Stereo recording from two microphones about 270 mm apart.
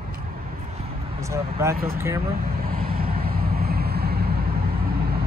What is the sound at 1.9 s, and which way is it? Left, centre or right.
Speech, centre.